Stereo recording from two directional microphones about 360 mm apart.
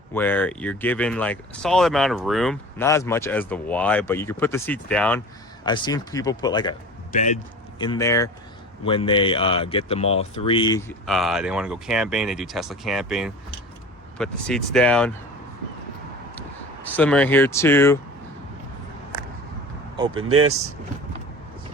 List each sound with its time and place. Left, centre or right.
0.1 s speech: centre
16.8 s speech: centre
20.1 s speech: right